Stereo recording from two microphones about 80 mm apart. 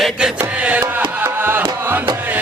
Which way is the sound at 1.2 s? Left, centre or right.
Right.